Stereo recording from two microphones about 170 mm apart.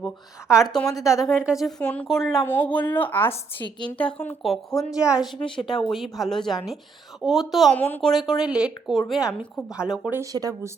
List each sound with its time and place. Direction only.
0.0 s a woman's voice: 5° right (ahead or behind)
3.3 s a woman's voice: 25° left (ahead or behind)
3.9 s a woman's voice: 10° left (ahead or behind)
7.8 s a woman's voice: 10° left (ahead or behind); by 10.2 s 10° right (ahead or behind)
10.3 s speech: 20° right (ahead or behind)